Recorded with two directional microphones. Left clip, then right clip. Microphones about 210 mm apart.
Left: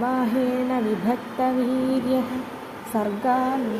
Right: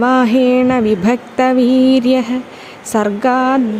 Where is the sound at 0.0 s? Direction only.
45° right (ahead or behind).